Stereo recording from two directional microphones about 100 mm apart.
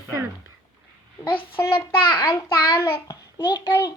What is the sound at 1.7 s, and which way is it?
Speech, 55° left (ahead or behind).